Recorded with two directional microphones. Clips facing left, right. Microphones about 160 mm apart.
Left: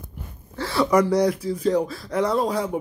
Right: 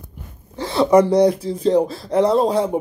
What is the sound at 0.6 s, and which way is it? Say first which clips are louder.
Speech: right 5 dB; 20° right (ahead or behind).